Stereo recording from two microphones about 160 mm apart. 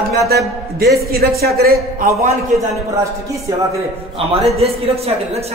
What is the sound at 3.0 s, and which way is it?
Speech, 20° right (ahead or behind).